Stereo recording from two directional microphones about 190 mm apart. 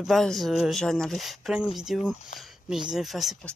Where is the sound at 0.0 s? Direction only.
Centre (ahead or behind).